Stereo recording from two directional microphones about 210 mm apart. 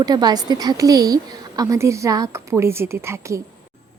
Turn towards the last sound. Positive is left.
turn(degrees=-15)  # may be behind; listen again after turning